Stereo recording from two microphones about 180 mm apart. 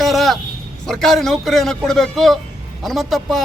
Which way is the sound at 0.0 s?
Centre (ahead or behind).